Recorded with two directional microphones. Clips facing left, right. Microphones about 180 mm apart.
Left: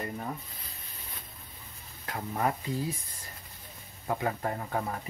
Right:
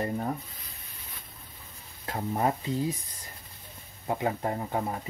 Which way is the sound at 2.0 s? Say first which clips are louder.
Right 3 dB; 25° right (ahead or behind).